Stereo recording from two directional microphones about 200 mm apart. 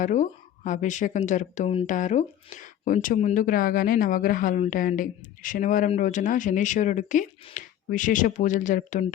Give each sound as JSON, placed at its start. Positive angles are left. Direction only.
{"t": 0.0, "sound": "speech", "side_deg": 40}